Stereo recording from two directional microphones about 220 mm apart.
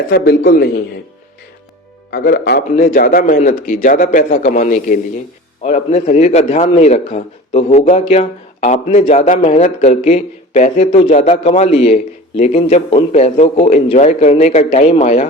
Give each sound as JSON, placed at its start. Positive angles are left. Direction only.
{"t": 0.1, "sound": "a man's voice", "side_deg": 45}
{"t": 2.0, "sound": "a man's voice", "side_deg": 45}